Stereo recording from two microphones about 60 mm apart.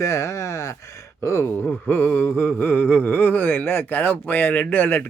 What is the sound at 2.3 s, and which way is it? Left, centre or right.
Speech, left.